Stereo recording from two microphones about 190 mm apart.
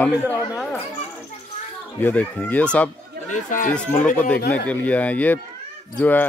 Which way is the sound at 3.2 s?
40° left (ahead or behind).